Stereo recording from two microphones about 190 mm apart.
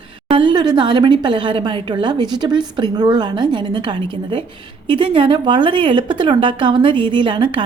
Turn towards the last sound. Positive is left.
turn(degrees=-25)  # may be behind; listen again after turning